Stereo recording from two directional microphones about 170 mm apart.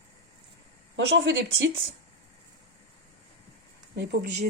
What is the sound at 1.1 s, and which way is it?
Speech, 90° right.